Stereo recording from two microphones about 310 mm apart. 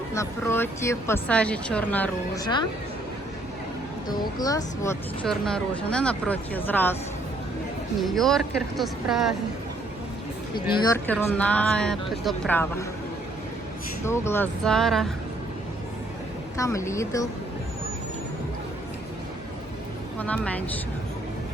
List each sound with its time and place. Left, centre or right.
0.1 s speech: centre
4.2 s speech: centre
8.0 s speech: centre
10.5 s speech: centre
14.0 s speech: centre
16.6 s speech: centre
20.1 s speech: centre